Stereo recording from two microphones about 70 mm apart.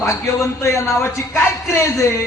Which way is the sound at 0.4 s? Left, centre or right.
Left.